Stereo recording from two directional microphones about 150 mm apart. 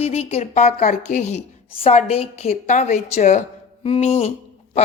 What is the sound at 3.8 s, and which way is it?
Speech, 40° left (ahead or behind).